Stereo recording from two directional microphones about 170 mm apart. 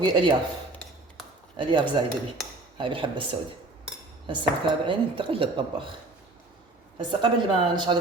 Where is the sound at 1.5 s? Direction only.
30° right (ahead or behind).